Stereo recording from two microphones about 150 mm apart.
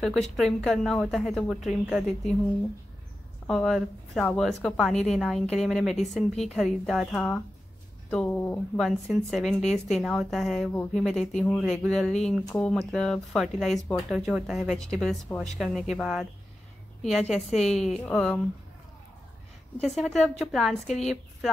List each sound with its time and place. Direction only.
0.0 s speech: centre (ahead or behind)
3.4 s speech: centre (ahead or behind)
9.1 s speech: centre (ahead or behind)
19.8 s speech: centre (ahead or behind)
20.8 s a woman's voice: 50° left (ahead or behind)